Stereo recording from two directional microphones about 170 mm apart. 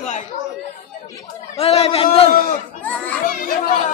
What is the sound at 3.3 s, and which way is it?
Children playing, 50° left (ahead or behind).